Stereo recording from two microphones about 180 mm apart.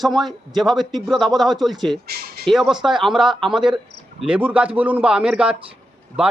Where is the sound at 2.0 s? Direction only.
60° right (ahead or behind).